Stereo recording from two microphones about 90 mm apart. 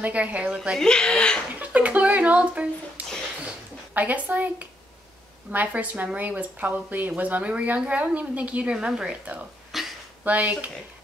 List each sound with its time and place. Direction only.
0.0 s a woman's voice: 15° right (ahead or behind)
0.7 s speech: 10° left (ahead or behind)
1.6 s a sound: 15° right (ahead or behind)
3.9 s a woman's voice: 15° right (ahead or behind)
9.7 s a sound: 5° right (ahead or behind)
10.2 s a woman's voice: 15° right (ahead or behind)